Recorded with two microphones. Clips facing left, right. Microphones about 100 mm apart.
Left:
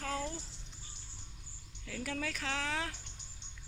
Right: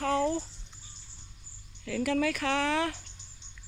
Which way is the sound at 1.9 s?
90° right.